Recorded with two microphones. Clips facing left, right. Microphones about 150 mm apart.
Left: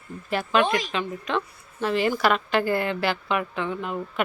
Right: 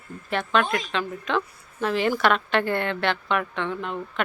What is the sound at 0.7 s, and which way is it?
Speech, 80° left.